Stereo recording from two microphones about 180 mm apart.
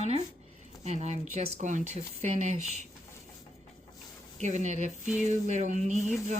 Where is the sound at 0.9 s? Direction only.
40° right (ahead or behind).